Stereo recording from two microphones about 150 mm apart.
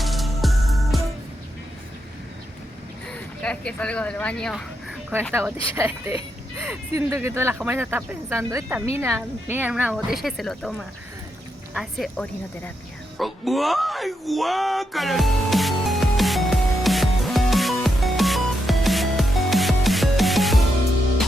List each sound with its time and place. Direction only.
0.0 s music: centre (ahead or behind)
3.1 s speech: 5° left (ahead or behind)
5.7 s a woman's voice: 15° right (ahead or behind); by 12.7 s 5° left (ahead or behind)
13.1 s a sound: centre (ahead or behind)